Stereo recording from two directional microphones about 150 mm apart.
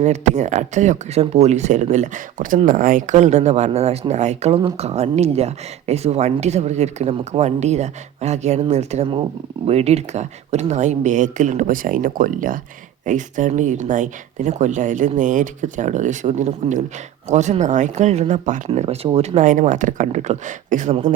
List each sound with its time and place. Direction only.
0.0 s speech: 50° right (ahead or behind)